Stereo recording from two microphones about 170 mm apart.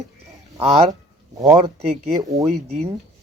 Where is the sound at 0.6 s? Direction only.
40° right (ahead or behind).